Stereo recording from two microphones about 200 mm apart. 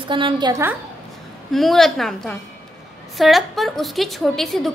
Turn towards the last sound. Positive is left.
turn(degrees=0)  # may be behind; listen again after turning